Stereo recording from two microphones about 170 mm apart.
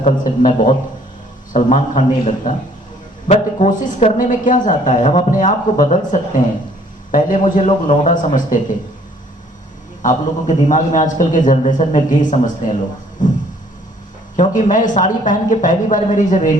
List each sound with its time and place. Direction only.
0.0 s a woman's voice: 50° left (ahead or behind)
10.0 s a woman's voice: 45° left (ahead or behind)